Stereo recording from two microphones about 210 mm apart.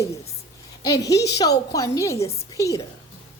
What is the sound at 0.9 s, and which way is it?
A woman's voice, 15° left (ahead or behind).